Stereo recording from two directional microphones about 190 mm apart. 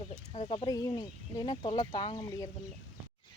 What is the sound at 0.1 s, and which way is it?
Speech, 35° left (ahead or behind).